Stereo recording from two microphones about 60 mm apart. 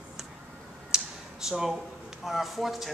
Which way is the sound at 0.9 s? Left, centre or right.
Centre.